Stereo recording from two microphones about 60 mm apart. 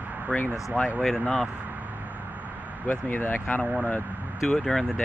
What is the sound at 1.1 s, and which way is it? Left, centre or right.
Speech, centre.